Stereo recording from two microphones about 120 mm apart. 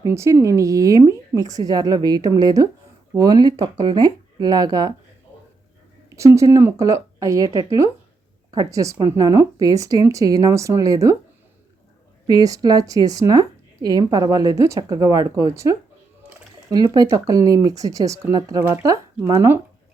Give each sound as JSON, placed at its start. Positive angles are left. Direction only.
{"t": 0.0, "sound": "a woman's voice", "side_deg": -25}
{"t": 6.1, "sound": "a woman's voice", "side_deg": -25}
{"t": 7.5, "sound": "speech", "side_deg": 45}
{"t": 8.5, "sound": "a woman's voice", "side_deg": -25}
{"t": 12.3, "sound": "speech", "side_deg": -30}
{"t": 16.9, "sound": "a woman's voice", "side_deg": -30}